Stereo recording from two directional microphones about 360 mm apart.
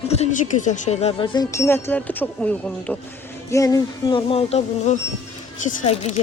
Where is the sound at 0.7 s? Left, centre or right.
Centre.